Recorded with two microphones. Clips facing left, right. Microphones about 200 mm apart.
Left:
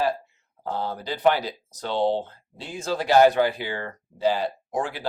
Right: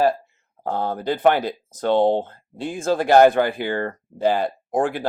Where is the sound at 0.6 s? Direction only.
50° right (ahead or behind).